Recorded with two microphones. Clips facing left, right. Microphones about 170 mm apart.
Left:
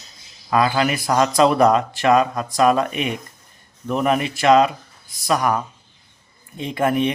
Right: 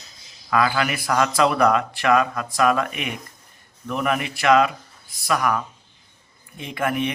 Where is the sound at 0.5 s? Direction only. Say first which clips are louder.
Left 3 dB; 25° left (ahead or behind).